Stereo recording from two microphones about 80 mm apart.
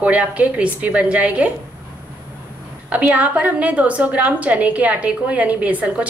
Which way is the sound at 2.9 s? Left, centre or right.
Right.